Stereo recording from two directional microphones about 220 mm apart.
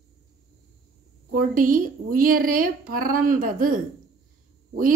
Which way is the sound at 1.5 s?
40° right (ahead or behind).